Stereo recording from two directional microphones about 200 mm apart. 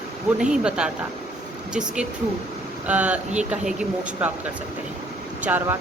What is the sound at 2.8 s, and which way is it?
Speech, 5° right (ahead or behind).